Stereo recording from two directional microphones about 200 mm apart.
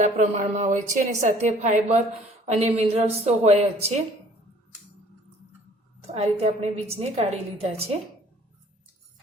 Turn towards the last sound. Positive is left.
turn(degrees=-30)  # may be behind; listen again after turning